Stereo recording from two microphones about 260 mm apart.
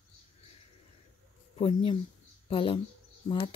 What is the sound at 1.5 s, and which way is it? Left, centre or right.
Speech, left.